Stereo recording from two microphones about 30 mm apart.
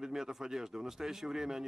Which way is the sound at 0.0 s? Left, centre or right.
Centre.